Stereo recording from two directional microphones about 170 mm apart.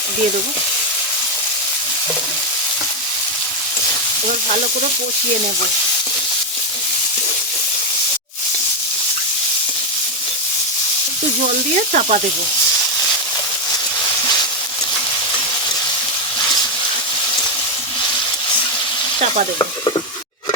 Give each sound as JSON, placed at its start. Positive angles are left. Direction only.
{"t": 11.4, "sound": "speech", "side_deg": -50}